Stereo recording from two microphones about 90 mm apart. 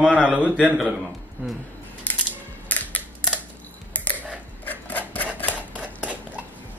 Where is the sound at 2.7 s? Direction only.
15° left (ahead or behind).